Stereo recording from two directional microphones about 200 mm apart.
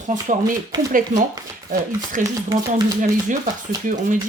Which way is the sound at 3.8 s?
40° right (ahead or behind).